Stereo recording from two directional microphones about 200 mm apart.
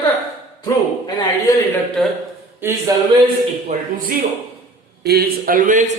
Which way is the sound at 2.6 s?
10° right (ahead or behind).